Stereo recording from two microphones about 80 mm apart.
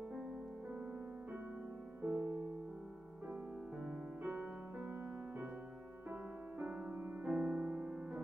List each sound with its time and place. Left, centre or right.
2.0 s music: centre
3.8 s music: centre
6.6 s music: centre